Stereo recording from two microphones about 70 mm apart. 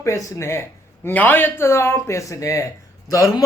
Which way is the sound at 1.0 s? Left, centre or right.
Left.